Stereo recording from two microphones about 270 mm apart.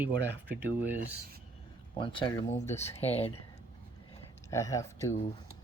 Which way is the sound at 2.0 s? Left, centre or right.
Centre.